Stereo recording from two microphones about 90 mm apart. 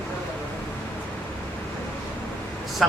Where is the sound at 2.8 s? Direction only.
Centre (ahead or behind).